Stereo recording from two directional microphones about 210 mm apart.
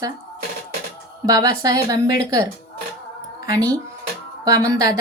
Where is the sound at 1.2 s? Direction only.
15° right (ahead or behind).